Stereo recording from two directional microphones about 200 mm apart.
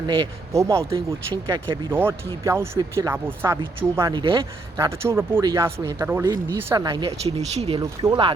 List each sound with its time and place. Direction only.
0.1 s speech: 20° right (ahead or behind)
7.8 s speech: 20° right (ahead or behind)